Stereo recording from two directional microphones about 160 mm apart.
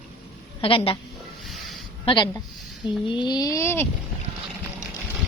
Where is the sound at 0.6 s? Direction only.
35° left (ahead or behind).